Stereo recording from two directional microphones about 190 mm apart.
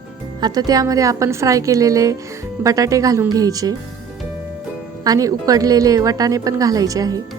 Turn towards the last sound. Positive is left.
turn(degrees=-20)  # may be behind; listen again after turning